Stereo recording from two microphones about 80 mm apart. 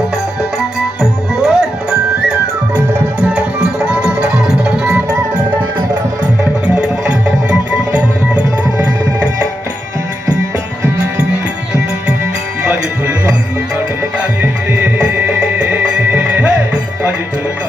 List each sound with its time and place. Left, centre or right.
1.4 s music: centre
6.4 s music: centre
14.4 s music: right
15.4 s music: centre